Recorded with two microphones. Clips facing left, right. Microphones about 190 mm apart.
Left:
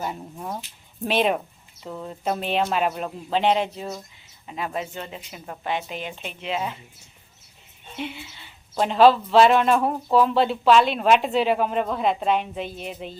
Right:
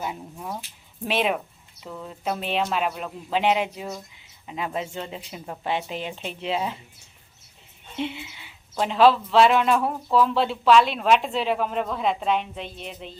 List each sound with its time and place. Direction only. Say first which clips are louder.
0.3 s speech: left 1 dB; 10° left (ahead or behind)
1.0 s speech: left 2 dB; centre (ahead or behind); by 6.7 s 30° right (ahead or behind)
7.9 s speech: right 3 dB; 25° right (ahead or behind)
8.7 s speech: left 2 dB; centre (ahead or behind)